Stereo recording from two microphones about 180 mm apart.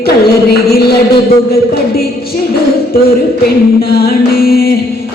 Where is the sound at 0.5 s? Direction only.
60° left (ahead or behind).